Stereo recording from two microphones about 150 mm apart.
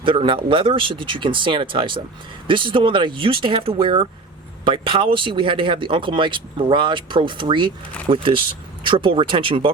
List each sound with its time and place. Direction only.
0.0 s speech: 35° right (ahead or behind)